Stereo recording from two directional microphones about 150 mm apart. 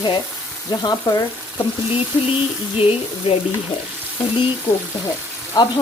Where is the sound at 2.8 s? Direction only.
40° left (ahead or behind).